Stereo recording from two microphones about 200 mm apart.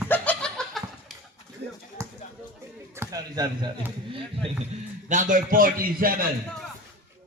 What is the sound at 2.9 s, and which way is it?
Speech, 20° right (ahead or behind).